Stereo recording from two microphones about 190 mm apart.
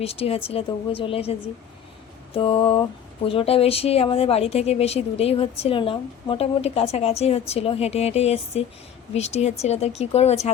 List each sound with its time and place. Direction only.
0.0 s a woman's voice: 30° left (ahead or behind)
2.3 s mantra: 30° left (ahead or behind)
3.2 s a woman's voice: 30° left (ahead or behind)